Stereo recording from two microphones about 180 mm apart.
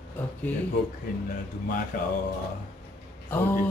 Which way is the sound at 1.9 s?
50° left (ahead or behind).